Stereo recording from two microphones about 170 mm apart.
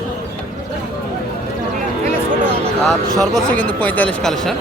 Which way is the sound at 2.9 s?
Centre (ahead or behind).